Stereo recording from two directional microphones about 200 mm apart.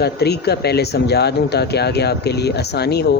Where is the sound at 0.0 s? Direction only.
55° left (ahead or behind).